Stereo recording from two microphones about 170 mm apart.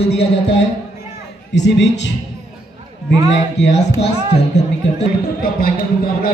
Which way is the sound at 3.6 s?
90° left.